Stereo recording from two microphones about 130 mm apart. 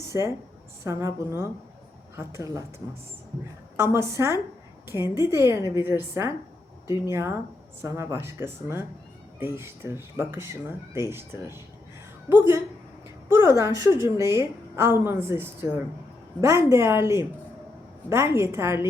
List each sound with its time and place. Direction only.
0.9 s a woman's voice: 20° right (ahead or behind)
6.8 s speech: 30° left (ahead or behind)
7.1 s a woman's voice: 20° right (ahead or behind)
13.2 s a woman's voice: 20° right (ahead or behind)